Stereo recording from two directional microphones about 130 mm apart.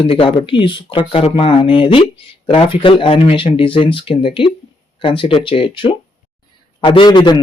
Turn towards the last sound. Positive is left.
turn(degrees=35)  # may be behind; listen again after turning